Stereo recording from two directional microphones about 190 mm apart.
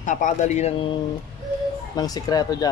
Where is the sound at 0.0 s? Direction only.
40° left (ahead or behind).